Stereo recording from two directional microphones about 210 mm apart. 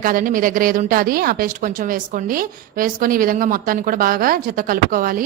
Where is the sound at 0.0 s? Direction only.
40° right (ahead or behind).